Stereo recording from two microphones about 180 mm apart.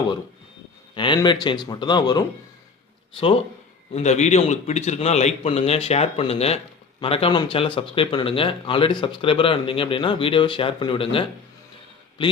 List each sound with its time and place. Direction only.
0.9 s speech: 25° left (ahead or behind)
3.9 s a man's voice: 40° left (ahead or behind)